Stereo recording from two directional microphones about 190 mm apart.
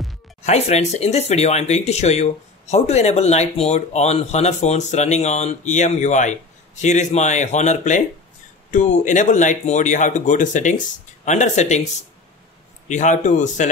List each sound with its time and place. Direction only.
0.4 s speech: 35° left (ahead or behind)